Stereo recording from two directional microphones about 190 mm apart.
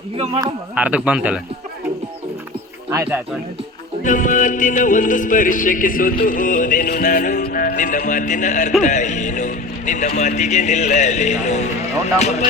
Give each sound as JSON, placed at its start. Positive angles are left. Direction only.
{"t": 0.8, "sound": "speech", "side_deg": -5}
{"t": 2.9, "sound": "speech", "side_deg": -15}
{"t": 4.0, "sound": "music", "side_deg": 45}
{"t": 8.8, "sound": "speech", "side_deg": 40}